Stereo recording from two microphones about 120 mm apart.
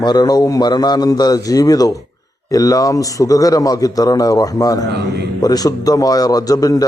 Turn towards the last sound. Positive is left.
turn(degrees=30)  # may be behind; listen again after turning